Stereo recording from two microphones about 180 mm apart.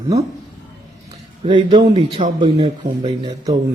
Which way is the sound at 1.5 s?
25° right (ahead or behind).